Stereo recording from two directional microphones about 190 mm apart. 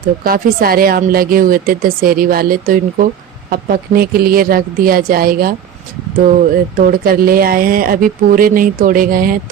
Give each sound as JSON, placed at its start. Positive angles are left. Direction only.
{"t": 0.3, "sound": "speech", "side_deg": -50}
{"t": 6.7, "sound": "speech", "side_deg": -50}